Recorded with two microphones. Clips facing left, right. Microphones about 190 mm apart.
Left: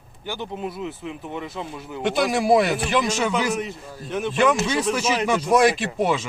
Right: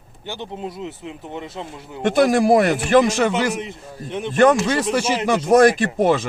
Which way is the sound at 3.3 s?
25° right (ahead or behind).